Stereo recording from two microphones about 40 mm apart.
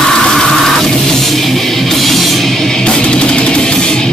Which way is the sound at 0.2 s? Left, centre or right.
Centre.